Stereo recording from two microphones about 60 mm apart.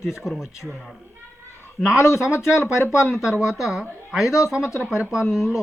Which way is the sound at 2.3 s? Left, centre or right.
Left.